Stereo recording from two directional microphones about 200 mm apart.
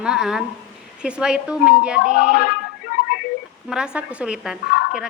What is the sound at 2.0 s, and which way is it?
Music, 40° left (ahead or behind).